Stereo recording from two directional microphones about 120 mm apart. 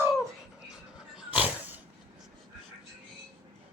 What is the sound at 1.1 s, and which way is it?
Pig, 10° right (ahead or behind).